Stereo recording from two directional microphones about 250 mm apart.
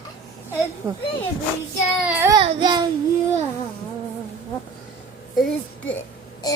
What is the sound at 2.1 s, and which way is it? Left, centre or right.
Child singing, centre.